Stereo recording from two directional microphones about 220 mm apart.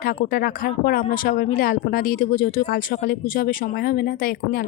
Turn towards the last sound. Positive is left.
turn(degrees=40)  # may be behind; listen again after turning